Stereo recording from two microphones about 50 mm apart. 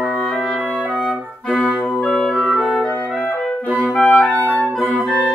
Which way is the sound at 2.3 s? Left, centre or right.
Left.